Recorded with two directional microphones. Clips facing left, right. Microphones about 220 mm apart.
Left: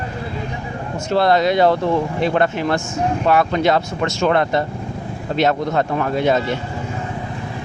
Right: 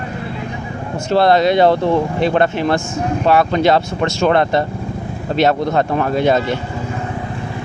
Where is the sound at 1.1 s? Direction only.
30° right (ahead or behind).